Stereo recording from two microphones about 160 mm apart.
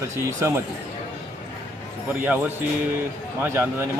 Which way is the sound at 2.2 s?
10° right (ahead or behind).